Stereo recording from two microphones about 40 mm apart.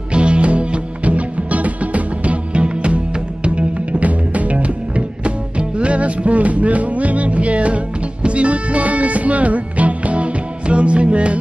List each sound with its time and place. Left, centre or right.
0.1 s music: right